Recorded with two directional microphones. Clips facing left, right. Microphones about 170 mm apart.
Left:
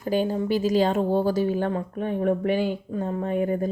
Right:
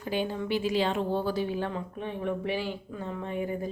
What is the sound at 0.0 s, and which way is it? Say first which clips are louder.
Speech: left 7 dB; 40° left (ahead or behind).